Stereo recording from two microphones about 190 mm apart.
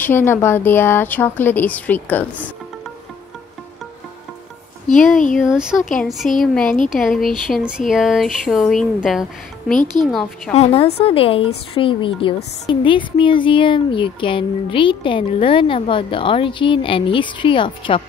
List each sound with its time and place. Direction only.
0.0 s a woman's voice: 10° left (ahead or behind)
5.4 s speech: 5° right (ahead or behind)
10.5 s speech: 35° left (ahead or behind)